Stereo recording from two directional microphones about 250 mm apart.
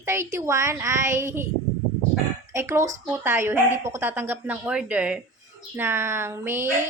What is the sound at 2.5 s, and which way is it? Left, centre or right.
A woman's voice, centre.